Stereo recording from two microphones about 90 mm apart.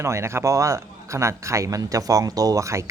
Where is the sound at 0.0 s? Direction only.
30° right (ahead or behind).